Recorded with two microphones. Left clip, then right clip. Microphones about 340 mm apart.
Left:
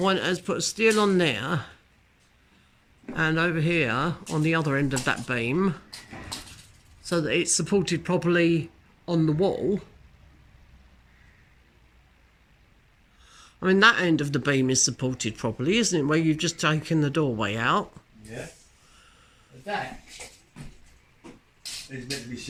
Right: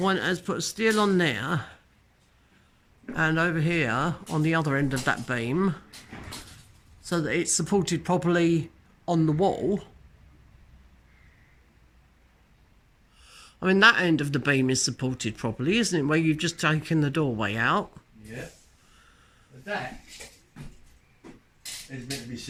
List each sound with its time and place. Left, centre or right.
0.0 s speech: centre
3.2 s speech: centre
7.0 s speech: centre
13.2 s speech: centre